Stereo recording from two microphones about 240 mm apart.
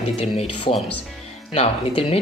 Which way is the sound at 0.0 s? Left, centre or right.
Left.